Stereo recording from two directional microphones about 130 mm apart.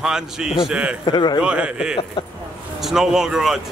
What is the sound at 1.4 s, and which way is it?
A man's voice, 10° right (ahead or behind).